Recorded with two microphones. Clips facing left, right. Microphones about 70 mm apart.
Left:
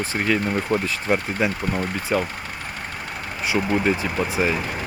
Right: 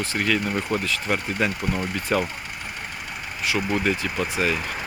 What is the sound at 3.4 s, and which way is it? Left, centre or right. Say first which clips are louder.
Speech: left 3 dB; left.